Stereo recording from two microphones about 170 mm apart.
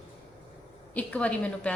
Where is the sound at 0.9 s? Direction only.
10° left (ahead or behind).